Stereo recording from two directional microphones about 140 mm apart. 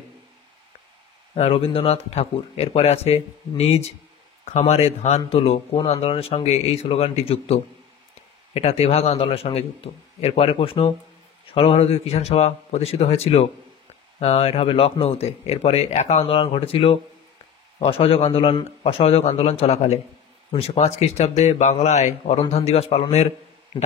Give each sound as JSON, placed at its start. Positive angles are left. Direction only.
{"t": 1.3, "sound": "speech", "side_deg": 45}